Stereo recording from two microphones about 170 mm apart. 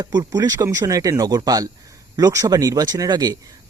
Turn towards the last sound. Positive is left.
turn(degrees=-25)  # may be behind; listen again after turning